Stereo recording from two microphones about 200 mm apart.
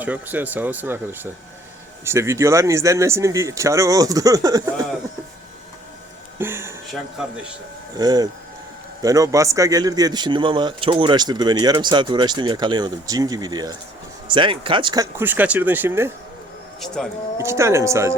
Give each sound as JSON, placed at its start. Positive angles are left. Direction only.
{"t": 0.0, "sound": "speech", "side_deg": -10}
{"t": 6.4, "sound": "speech", "side_deg": -10}
{"t": 7.9, "sound": "speech", "side_deg": -20}
{"t": 16.8, "sound": "speech", "side_deg": 5}
{"t": 17.3, "sound": "speech", "side_deg": -15}